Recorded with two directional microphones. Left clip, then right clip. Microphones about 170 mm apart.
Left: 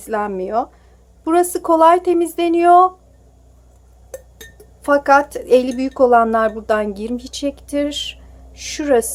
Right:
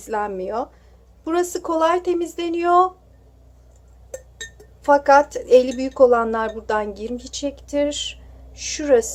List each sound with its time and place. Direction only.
0.0 s speech: 20° left (ahead or behind)
4.8 s speech: 25° left (ahead or behind)